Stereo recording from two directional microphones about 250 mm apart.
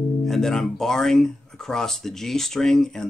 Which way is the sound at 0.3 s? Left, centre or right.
Centre.